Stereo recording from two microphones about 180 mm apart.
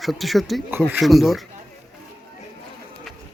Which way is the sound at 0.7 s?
10° right (ahead or behind).